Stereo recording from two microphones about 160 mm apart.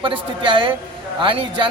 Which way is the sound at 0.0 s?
30° right (ahead or behind).